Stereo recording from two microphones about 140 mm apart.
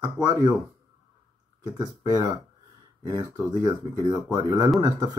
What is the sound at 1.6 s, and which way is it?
Speech, 30° right (ahead or behind).